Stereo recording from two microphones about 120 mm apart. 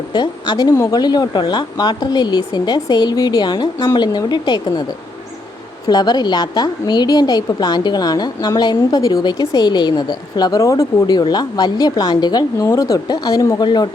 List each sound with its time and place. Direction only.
0.1 s speech: 35° left (ahead or behind)
0.7 s speech: 20° left (ahead or behind)
0.9 s speech: 35° left (ahead or behind)
5.9 s speech: 35° left (ahead or behind)